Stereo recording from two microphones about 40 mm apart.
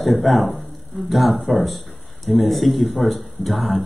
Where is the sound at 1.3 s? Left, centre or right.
Centre.